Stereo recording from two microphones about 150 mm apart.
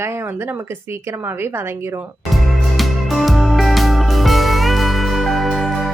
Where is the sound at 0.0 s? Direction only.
15° right (ahead or behind).